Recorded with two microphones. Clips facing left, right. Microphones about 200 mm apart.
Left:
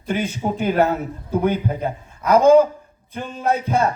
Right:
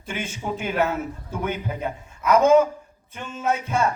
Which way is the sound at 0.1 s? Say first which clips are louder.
Left 7 dB; 35° left (ahead or behind).